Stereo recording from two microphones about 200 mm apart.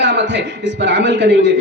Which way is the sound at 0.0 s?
60° right (ahead or behind).